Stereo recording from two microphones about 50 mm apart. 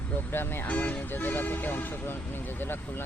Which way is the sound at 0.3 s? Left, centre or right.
Left.